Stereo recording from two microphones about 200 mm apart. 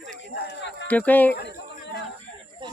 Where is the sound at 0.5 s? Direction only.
60° left (ahead or behind).